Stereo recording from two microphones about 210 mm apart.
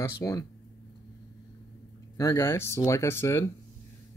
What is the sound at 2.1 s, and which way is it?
Speech, 15° left (ahead or behind).